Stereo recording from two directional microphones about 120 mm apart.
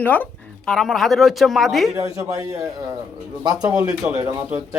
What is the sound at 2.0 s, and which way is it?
Speech, 50° left (ahead or behind).